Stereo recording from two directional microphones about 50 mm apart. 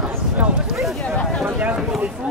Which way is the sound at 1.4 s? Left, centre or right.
Right.